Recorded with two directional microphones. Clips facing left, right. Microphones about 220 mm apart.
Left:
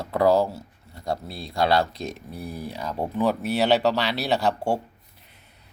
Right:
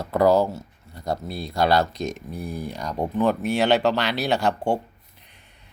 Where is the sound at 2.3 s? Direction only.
5° left (ahead or behind).